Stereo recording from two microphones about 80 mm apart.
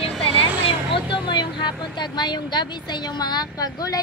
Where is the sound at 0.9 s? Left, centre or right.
Left.